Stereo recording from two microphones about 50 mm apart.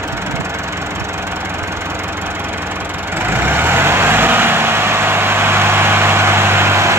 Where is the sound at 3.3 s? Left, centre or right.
Right.